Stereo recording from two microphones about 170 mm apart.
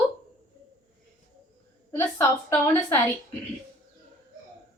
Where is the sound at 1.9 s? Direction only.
15° left (ahead or behind).